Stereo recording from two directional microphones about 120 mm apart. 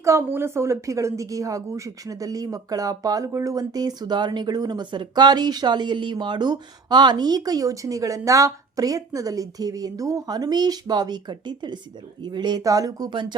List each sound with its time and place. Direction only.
0.0 s a woman's voice: 25° right (ahead or behind)